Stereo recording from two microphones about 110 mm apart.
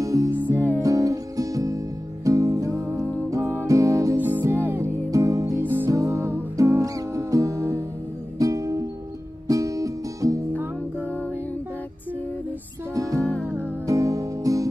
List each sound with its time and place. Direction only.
0.0 s music: 30° right (ahead or behind)
0.5 s music: 15° left (ahead or behind)
0.8 s music: 30° right (ahead or behind)
2.9 s music: 15° left (ahead or behind)
3.3 s music: 25° right (ahead or behind)
5.6 s music: 15° right (ahead or behind)
11.1 s music: 15° left (ahead or behind)
12.9 s music: 30° right (ahead or behind)